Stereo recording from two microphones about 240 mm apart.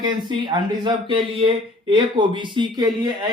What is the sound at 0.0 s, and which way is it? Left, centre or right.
Speech, centre.